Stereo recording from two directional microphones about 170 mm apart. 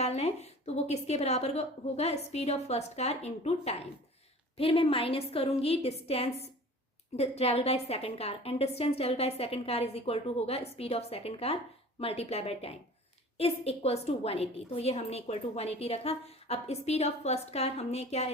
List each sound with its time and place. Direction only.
0.0 s a woman's voice: 40° left (ahead or behind)